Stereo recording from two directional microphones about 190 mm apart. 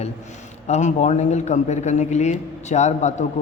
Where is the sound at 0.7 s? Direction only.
40° left (ahead or behind).